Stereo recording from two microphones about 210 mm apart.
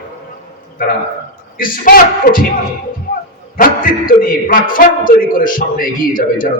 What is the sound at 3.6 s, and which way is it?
A man's voice, 40° left (ahead or behind).